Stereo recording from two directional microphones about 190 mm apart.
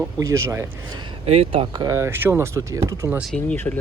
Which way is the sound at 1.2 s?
30° right (ahead or behind).